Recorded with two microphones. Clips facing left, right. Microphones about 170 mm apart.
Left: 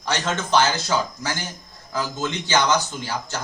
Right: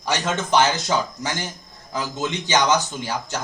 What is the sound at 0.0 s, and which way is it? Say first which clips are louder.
A man's voice: right 1 dB; 15° right (ahead or behind).